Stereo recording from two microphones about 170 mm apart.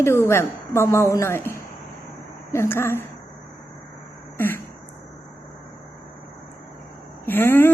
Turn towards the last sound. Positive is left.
turn(degrees=10)  # may be behind; listen again after turning